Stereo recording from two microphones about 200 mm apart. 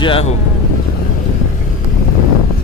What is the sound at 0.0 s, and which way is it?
Speech, 30° left (ahead or behind).